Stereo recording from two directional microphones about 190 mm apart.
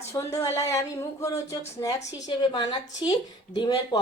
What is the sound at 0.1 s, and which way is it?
A woman's voice, 15° left (ahead or behind).